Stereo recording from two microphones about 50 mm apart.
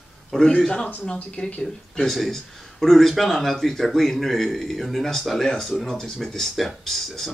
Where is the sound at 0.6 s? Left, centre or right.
Centre.